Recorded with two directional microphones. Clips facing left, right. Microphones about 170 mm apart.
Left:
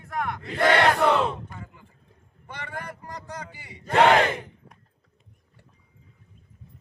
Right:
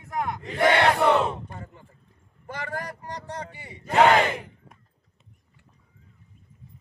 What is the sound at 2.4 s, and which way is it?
Speech, 40° right (ahead or behind).